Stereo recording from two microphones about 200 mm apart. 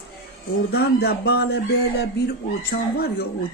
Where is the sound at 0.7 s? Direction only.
50° left (ahead or behind).